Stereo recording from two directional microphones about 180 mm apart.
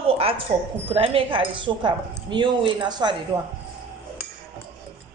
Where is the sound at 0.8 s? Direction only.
30° right (ahead or behind).